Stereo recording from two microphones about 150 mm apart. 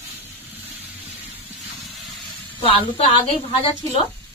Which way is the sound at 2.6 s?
40° left (ahead or behind).